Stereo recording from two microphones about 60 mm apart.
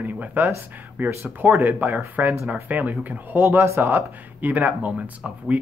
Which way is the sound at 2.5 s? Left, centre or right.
Right.